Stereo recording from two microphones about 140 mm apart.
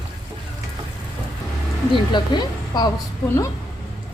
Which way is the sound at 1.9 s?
30° left (ahead or behind).